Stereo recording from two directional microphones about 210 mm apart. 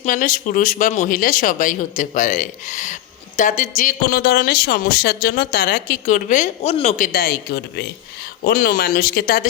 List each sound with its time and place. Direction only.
0.0 s speech: 40° left (ahead or behind)